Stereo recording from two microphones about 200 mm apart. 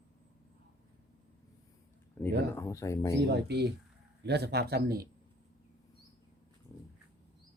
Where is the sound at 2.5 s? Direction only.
15° left (ahead or behind).